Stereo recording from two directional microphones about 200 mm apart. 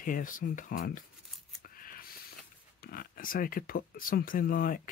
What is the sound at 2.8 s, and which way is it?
Speech, 50° left (ahead or behind).